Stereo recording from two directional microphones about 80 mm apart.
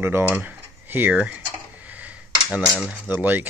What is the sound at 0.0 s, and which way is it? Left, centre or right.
Speech, right.